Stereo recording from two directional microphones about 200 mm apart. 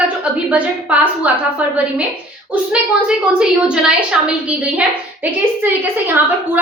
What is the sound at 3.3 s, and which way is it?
A woman's voice, 5° right (ahead or behind).